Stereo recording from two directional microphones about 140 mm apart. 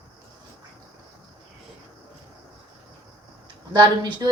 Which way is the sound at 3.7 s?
30° right (ahead or behind).